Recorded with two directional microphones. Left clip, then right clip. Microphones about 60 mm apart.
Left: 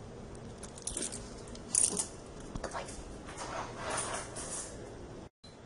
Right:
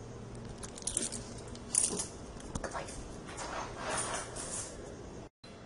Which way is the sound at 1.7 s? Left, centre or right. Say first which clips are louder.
Left 1 dB; left.